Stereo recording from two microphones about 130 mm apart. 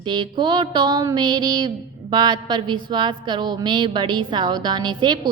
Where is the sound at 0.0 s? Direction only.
35° right (ahead or behind).